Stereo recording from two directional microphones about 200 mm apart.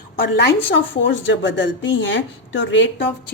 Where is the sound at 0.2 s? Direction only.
55° left (ahead or behind).